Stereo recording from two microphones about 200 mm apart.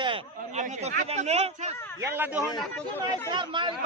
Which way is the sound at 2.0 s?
10° right (ahead or behind).